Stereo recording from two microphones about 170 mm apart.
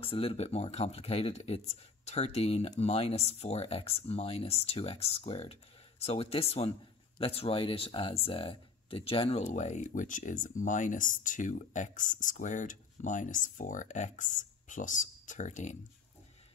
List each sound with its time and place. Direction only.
0.0 s speech: 30° left (ahead or behind)
9.4 s speech: 45° left (ahead or behind)